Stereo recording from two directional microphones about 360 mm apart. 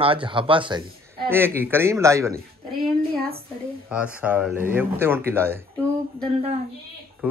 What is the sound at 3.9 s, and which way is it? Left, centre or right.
Speech, centre.